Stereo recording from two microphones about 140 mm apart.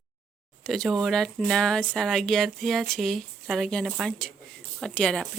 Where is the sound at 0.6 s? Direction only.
Centre (ahead or behind).